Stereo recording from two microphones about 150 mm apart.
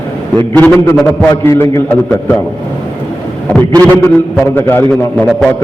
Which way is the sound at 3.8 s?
10° left (ahead or behind).